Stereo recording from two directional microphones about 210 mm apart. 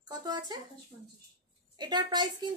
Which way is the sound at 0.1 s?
20° right (ahead or behind).